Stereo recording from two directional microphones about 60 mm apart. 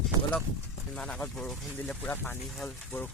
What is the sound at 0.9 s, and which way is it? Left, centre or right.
Speech, centre.